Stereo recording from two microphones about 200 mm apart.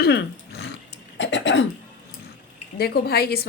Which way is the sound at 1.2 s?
65° left (ahead or behind).